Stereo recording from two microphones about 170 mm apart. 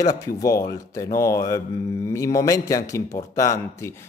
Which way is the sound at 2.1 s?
20° left (ahead or behind).